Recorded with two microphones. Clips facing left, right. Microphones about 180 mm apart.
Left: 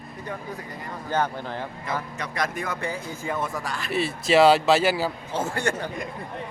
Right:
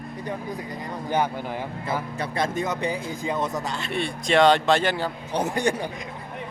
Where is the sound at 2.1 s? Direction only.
30° right (ahead or behind).